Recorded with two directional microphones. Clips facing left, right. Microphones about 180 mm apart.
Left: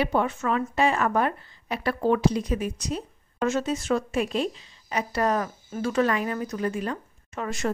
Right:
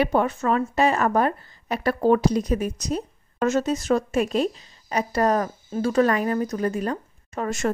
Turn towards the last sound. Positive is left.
turn(degrees=-45)  # may be behind; listen again after turning